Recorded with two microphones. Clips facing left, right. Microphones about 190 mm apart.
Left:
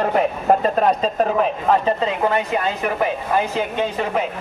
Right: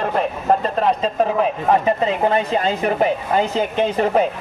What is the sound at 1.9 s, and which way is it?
Speech, 25° right (ahead or behind).